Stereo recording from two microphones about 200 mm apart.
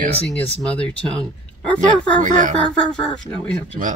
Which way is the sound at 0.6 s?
5° left (ahead or behind).